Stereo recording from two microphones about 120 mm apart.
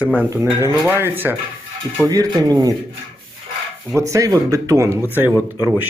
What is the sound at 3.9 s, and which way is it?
Speech, 25° right (ahead or behind).